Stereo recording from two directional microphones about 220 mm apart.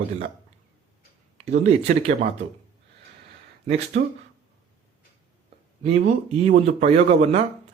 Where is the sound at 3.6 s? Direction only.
30° right (ahead or behind).